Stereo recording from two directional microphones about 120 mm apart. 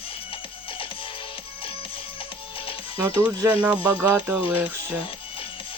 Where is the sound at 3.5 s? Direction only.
15° right (ahead or behind).